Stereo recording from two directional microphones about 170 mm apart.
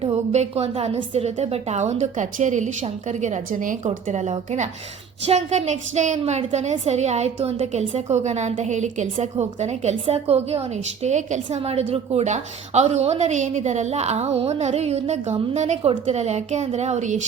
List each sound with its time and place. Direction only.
0.0 s a woman's voice: 35° right (ahead or behind)